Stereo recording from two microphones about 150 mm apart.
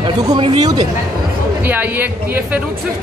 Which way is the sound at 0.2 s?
25° right (ahead or behind).